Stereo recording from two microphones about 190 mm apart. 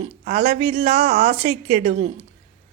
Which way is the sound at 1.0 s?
45° right (ahead or behind).